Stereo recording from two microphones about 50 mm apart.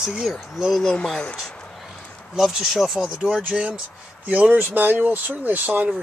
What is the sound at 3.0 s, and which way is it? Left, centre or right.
Speech, centre.